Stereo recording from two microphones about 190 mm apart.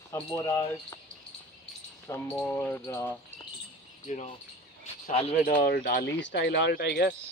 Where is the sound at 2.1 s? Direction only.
10° left (ahead or behind).